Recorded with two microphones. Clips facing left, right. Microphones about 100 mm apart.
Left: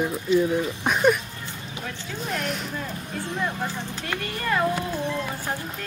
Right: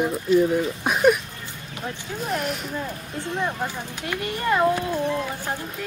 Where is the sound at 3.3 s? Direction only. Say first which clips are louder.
Right 2 dB; 15° right (ahead or behind).